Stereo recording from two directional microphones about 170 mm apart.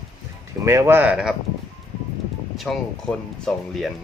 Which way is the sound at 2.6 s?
Centre (ahead or behind).